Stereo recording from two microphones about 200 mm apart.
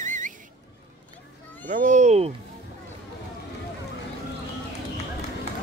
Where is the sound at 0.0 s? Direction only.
40° right (ahead or behind).